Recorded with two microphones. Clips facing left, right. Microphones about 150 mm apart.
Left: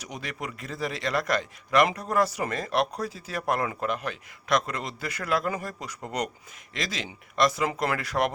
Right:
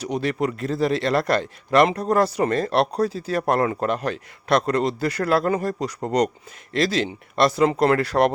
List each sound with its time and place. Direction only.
0.0 s a man's voice: 30° right (ahead or behind)